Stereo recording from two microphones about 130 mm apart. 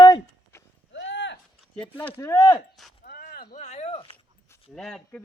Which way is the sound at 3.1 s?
90° left.